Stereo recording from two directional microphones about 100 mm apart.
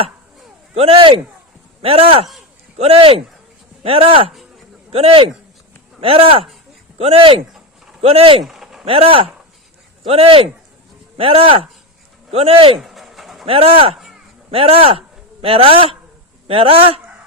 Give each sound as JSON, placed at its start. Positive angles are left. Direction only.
{"t": 0.7, "sound": "speech", "side_deg": -80}
{"t": 4.3, "sound": "a sound", "side_deg": 0}
{"t": 4.9, "sound": "speech", "side_deg": -75}
{"t": 8.4, "sound": "a sound", "side_deg": -5}
{"t": 8.8, "sound": "speech", "side_deg": -70}
{"t": 12.8, "sound": "pigeon", "side_deg": 0}
{"t": 13.4, "sound": "a man's voice", "side_deg": -75}